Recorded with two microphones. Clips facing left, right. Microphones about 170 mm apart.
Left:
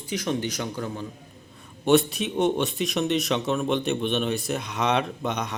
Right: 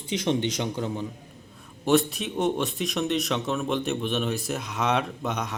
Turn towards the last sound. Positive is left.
turn(degrees=0)  # may be behind; listen again after turning